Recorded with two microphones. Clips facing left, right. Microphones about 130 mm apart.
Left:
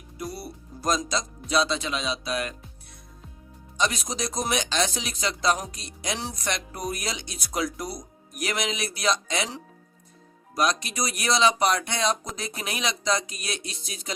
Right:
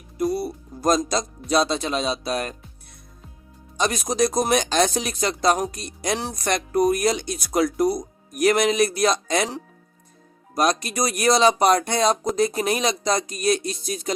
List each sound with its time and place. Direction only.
0.2 s music: 45° right (ahead or behind)
1.5 s speech: 45° right (ahead or behind)
3.8 s speech: 50° right (ahead or behind)